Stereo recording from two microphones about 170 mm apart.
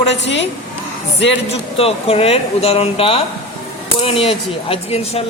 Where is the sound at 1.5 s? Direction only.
35° left (ahead or behind).